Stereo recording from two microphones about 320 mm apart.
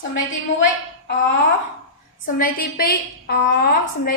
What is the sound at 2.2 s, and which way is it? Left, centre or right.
A woman's voice, left.